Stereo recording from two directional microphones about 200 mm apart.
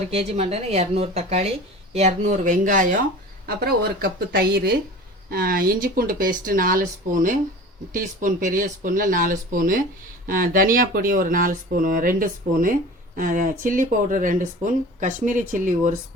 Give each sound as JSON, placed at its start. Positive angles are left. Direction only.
{"t": 0.1, "sound": "speech", "side_deg": -30}